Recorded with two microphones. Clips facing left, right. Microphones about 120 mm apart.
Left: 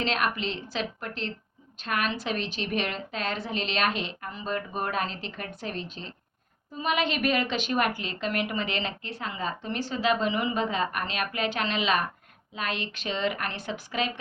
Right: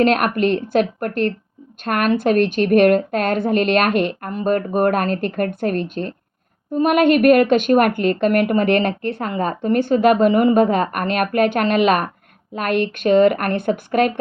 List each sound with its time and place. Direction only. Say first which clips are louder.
0.0 s a woman's voice: right 12 dB; 55° right (ahead or behind)